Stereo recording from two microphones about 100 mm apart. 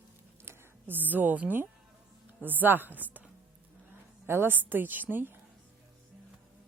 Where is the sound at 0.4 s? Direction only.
20° right (ahead or behind).